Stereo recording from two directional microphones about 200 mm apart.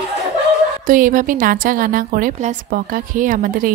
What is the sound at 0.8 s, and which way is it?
A woman's voice, 45° right (ahead or behind).